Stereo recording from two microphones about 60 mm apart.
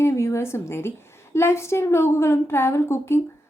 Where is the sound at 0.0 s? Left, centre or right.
Left.